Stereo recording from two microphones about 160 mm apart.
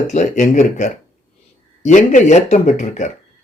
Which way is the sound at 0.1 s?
50° left (ahead or behind).